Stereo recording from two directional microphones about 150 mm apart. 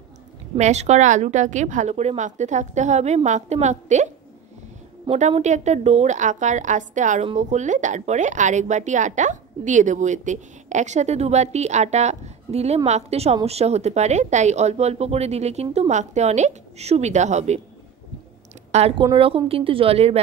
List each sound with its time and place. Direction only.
0.6 s speech: 50° right (ahead or behind)
5.1 s speech: 45° right (ahead or behind)
18.7 s a woman's voice: 45° right (ahead or behind)